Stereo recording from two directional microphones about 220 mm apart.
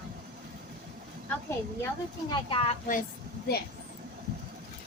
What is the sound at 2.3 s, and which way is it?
Speech, 25° left (ahead or behind).